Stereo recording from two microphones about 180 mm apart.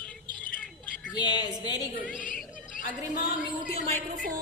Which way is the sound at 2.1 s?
45° left (ahead or behind).